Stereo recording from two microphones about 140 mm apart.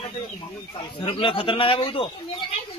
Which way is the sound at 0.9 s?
40° left (ahead or behind).